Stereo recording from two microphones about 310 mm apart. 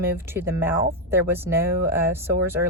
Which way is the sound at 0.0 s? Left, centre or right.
Centre.